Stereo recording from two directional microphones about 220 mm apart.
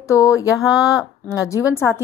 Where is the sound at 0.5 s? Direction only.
Centre (ahead or behind).